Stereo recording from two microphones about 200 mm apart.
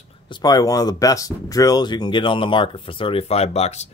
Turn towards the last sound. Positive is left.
turn(degrees=30)  # may be behind; listen again after turning